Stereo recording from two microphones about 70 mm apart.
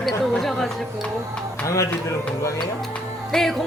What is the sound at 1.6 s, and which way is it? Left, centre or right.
Speech, left.